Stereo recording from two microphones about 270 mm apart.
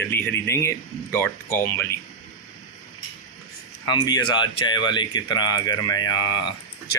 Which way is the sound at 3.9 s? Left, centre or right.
Centre.